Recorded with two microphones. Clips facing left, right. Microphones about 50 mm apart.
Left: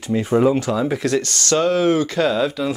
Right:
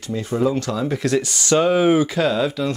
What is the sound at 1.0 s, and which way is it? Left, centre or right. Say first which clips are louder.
Speech: even; centre.